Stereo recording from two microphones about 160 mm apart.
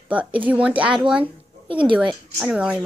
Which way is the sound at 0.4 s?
10° right (ahead or behind).